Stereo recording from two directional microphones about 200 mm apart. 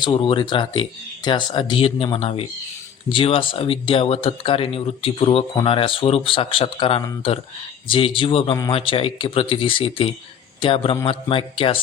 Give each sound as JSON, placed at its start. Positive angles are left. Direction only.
{"t": 0.0, "sound": "speech", "side_deg": 25}